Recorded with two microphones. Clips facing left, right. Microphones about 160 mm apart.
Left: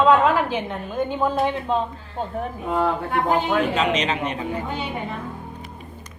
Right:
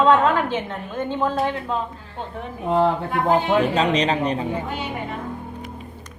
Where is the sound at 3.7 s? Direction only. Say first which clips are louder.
Right 2 dB; 35° right (ahead or behind).